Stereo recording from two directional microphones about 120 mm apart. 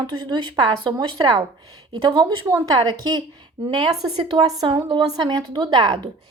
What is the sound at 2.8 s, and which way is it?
A woman's voice, 40° right (ahead or behind).